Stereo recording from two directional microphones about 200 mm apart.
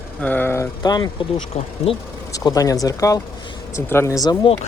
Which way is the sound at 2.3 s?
15° left (ahead or behind).